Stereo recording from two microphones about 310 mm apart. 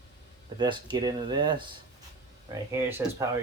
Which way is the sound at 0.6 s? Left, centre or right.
Centre.